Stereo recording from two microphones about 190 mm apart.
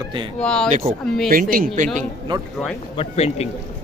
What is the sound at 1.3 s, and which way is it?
Speech, 45° right (ahead or behind).